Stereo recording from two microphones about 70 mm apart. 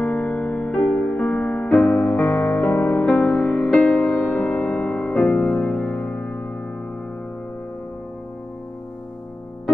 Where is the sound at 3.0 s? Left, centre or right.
Centre.